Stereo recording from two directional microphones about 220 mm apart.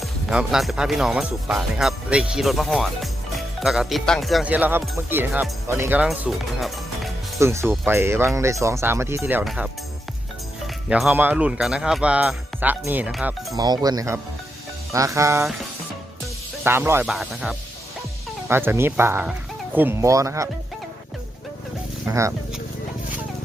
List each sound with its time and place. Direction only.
0.0 s speech: 5° right (ahead or behind)
7.3 s speech: 10° right (ahead or behind)
9.4 s speech: centre (ahead or behind)
10.8 s speech: 5° right (ahead or behind)
13.6 s speech: 15° right (ahead or behind)
16.6 s speech: 10° right (ahead or behind)
22.0 s a sound: 15° right (ahead or behind)